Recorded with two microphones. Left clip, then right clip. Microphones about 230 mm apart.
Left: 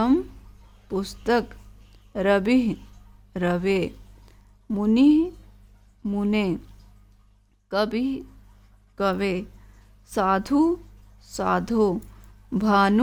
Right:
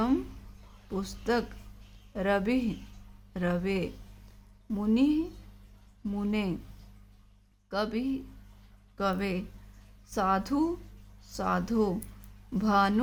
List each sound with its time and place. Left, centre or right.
0.9 s speech: left
7.7 s speech: left